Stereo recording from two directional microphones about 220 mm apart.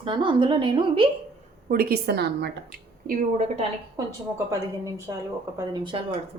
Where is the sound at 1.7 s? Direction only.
45° right (ahead or behind).